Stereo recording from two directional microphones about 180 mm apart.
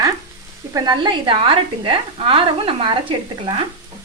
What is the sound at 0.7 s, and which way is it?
Speech, 25° right (ahead or behind).